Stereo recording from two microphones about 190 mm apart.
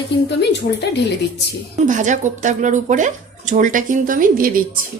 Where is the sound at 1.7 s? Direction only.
40° right (ahead or behind).